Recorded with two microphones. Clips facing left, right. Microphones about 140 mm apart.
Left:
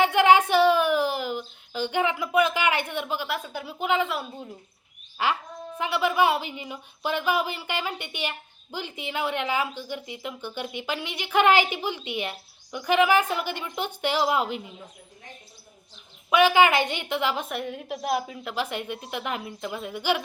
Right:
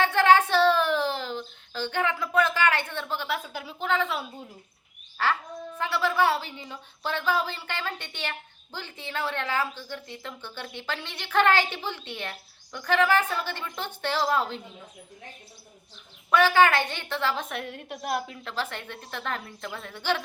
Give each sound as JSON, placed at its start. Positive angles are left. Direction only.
{"t": 0.0, "sound": "a sound", "side_deg": 15}
{"t": 3.2, "sound": "a woman's voice", "side_deg": 0}
{"t": 3.8, "sound": "a woman's voice", "side_deg": 15}
{"t": 5.1, "sound": "a woman's voice", "side_deg": 15}
{"t": 16.3, "sound": "a woman's voice", "side_deg": 15}
{"t": 17.5, "sound": "a woman's voice", "side_deg": 5}
{"t": 18.5, "sound": "a woman's voice", "side_deg": 15}